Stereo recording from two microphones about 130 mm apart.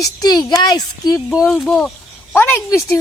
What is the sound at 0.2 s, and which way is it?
Speech, 30° left (ahead or behind).